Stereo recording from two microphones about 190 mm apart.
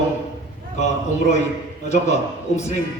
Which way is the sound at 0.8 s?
35° left (ahead or behind).